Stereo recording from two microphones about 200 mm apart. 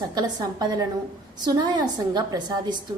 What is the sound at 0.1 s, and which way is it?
A woman's voice, 20° right (ahead or behind).